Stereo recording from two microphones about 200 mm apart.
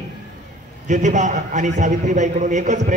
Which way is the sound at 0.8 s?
40° right (ahead or behind).